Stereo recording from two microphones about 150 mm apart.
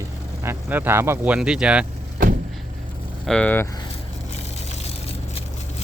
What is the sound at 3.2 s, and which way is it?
Speech, 5° left (ahead or behind).